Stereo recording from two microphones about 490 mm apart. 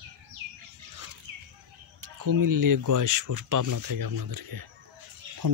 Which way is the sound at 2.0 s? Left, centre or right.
Right.